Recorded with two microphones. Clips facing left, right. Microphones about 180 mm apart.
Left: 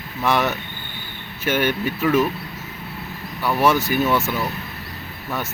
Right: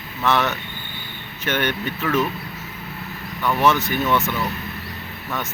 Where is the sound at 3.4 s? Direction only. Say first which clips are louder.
Left 1 dB; 10° left (ahead or behind).